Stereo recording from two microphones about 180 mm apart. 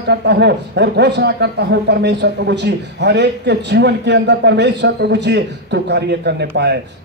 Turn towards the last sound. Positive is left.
turn(degrees=-65)  # may be behind; listen again after turning